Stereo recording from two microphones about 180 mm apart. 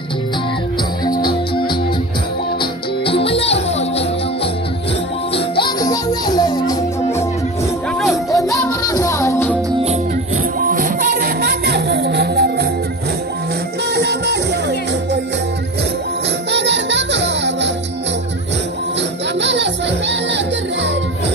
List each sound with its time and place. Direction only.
2.6 s music: 30° left (ahead or behind)
5.3 s music: 25° left (ahead or behind)
8.3 s music: 15° left (ahead or behind)
10.6 s music: 50° right (ahead or behind); by 12.6 s 65° right (ahead or behind)
13.9 s music: 70° right (ahead or behind)
16.4 s music: 75° right (ahead or behind)
19.4 s music: 75° right (ahead or behind)